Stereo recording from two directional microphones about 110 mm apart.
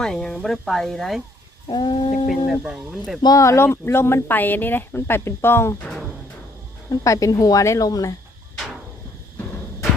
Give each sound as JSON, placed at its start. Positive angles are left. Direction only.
{"t": 0.0, "sound": "speech", "side_deg": 5}
{"t": 1.6, "sound": "a sound", "side_deg": 45}
{"t": 2.2, "sound": "speech", "side_deg": 0}
{"t": 3.2, "sound": "speech", "side_deg": 35}
{"t": 7.0, "sound": "speech", "side_deg": 30}